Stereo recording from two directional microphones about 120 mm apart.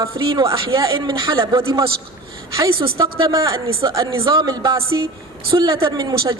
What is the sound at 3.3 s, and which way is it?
Speech, 30° right (ahead or behind).